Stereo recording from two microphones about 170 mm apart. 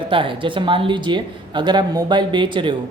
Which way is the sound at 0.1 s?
30° right (ahead or behind).